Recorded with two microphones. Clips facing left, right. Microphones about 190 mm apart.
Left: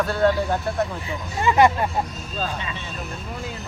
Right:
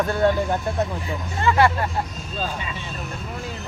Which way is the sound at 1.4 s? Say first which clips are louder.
Left 2 dB; 15° left (ahead or behind).